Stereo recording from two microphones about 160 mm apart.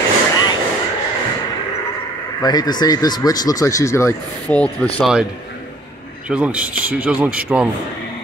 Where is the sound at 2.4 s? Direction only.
25° left (ahead or behind); by 4.9 s 10° left (ahead or behind).